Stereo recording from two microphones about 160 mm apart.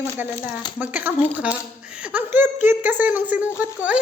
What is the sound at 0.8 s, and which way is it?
A man's voice, 10° right (ahead or behind).